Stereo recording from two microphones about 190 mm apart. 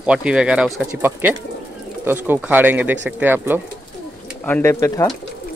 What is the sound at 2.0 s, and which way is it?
Speech, 10° right (ahead or behind).